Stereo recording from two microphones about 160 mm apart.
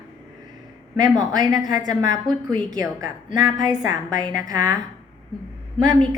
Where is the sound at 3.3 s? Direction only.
25° right (ahead or behind).